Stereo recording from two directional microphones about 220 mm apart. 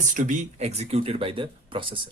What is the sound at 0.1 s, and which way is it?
Speech, 35° right (ahead or behind).